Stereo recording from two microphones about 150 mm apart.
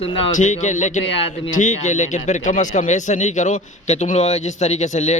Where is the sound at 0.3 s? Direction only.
55° left (ahead or behind).